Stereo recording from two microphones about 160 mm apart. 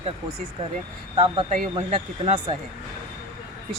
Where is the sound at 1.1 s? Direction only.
35° right (ahead or behind).